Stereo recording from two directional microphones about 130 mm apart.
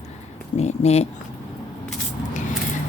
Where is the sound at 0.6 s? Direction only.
55° left (ahead or behind).